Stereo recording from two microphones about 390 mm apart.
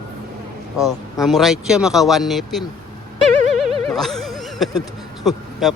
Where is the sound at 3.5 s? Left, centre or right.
Centre.